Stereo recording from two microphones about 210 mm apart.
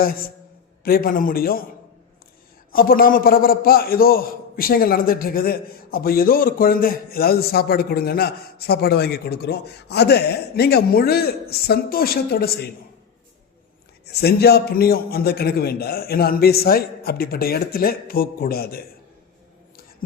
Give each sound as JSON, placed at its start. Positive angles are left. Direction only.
{"t": 0.0, "sound": "a man's voice", "side_deg": 45}
{"t": 2.7, "sound": "a man's voice", "side_deg": 45}
{"t": 14.1, "sound": "a man's voice", "side_deg": 50}